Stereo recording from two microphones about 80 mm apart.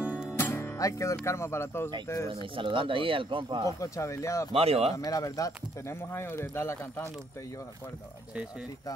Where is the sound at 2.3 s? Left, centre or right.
Right.